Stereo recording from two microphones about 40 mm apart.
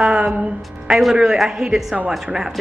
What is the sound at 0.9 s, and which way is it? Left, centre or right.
A woman's voice, centre.